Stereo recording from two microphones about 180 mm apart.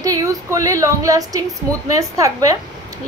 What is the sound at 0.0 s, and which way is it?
A woman's voice, 20° right (ahead or behind).